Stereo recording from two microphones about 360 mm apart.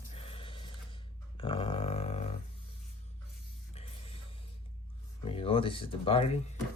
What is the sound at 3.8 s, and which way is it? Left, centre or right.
Music, centre.